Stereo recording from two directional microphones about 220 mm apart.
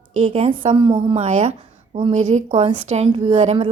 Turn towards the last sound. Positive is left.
turn(degrees=-25)  # may be behind; listen again after turning